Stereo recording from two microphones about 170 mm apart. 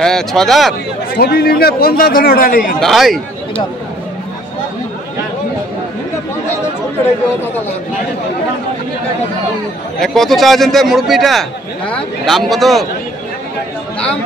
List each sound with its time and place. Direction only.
0.0 s a man's voice: centre (ahead or behind)
1.1 s a man's voice: 70° left (ahead or behind)
2.8 s a man's voice: centre (ahead or behind)
9.9 s a man's voice: centre (ahead or behind)